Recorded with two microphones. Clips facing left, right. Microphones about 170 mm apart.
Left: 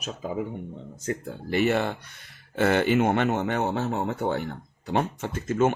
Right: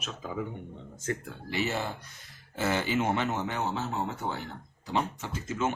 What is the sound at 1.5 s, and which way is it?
Speech, 55° left (ahead or behind).